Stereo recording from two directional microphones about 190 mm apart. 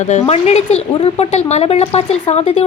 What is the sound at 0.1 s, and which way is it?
Speech, 35° left (ahead or behind).